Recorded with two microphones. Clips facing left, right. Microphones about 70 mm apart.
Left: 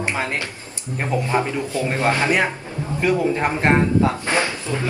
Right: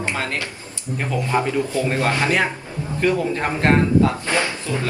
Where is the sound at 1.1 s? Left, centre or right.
Left.